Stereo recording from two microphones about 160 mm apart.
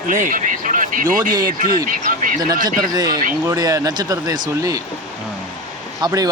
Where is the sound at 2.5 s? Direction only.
60° right (ahead or behind).